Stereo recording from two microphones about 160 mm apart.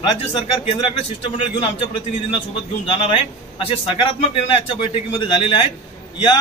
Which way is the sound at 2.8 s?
35° left (ahead or behind).